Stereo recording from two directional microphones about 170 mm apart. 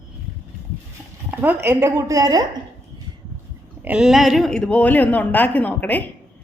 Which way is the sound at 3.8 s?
5° right (ahead or behind).